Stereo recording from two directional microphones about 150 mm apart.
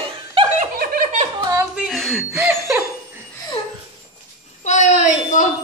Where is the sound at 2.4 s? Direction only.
15° right (ahead or behind).